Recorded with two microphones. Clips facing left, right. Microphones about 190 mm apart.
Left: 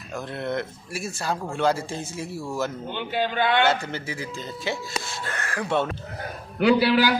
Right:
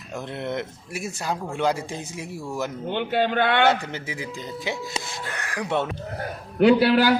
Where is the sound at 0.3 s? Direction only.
20° right (ahead or behind).